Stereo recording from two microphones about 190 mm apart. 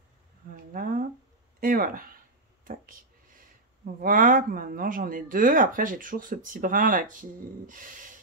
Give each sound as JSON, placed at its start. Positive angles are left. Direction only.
{"t": 0.7, "sound": "speech", "side_deg": -45}